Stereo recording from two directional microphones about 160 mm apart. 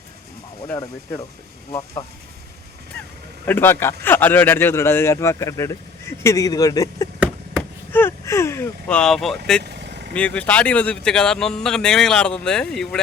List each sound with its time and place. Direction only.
2.0 s speech: 30° left (ahead or behind)
3.4 s speech: 15° left (ahead or behind)
9.6 s vehicle: 90° right
10.2 s speech: 10° left (ahead or behind)